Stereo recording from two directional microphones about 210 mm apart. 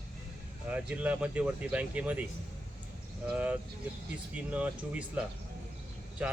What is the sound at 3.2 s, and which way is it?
Speech, 5° right (ahead or behind).